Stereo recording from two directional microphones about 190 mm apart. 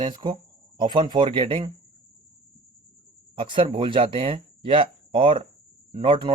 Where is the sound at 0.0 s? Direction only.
20° right (ahead or behind).